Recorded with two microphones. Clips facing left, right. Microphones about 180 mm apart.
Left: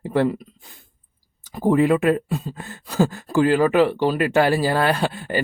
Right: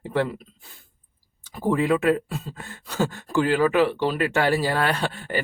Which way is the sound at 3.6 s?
15° left (ahead or behind).